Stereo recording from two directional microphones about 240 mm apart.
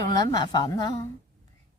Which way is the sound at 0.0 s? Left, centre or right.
Centre.